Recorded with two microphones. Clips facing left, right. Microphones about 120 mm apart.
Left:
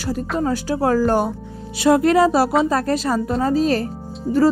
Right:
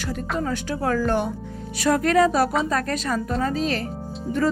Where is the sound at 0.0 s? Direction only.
35° left (ahead or behind).